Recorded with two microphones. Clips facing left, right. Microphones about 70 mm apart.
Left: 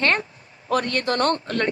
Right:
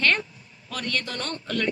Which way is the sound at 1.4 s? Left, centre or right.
Left.